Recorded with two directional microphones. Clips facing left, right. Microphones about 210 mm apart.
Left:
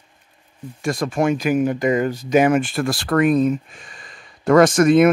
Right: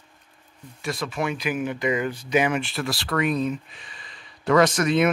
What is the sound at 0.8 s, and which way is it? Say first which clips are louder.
Speech: left 7 dB; 50° left (ahead or behind).